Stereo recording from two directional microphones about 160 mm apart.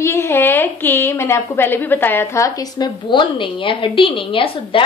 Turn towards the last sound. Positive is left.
turn(degrees=35)  # may be behind; listen again after turning